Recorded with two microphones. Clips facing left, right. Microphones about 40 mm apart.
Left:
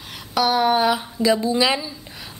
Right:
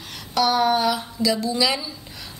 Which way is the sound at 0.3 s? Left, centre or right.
Centre.